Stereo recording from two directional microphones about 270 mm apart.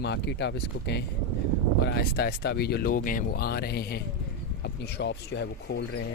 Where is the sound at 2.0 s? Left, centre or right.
Left.